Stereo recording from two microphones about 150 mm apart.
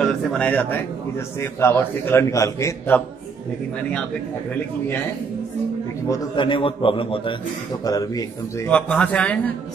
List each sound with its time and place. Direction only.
0.0 s a man's voice: 5° left (ahead or behind)
6.3 s a man's voice: 35° left (ahead or behind)
7.8 s a man's voice: 25° left (ahead or behind)
8.6 s a man's voice: 10° left (ahead or behind)